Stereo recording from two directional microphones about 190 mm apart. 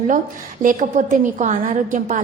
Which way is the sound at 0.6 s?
45° right (ahead or behind).